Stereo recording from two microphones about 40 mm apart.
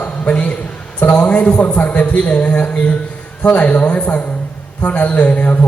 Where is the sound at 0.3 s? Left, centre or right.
Left.